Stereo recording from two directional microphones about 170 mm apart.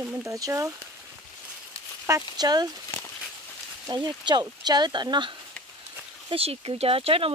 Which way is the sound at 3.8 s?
25° right (ahead or behind).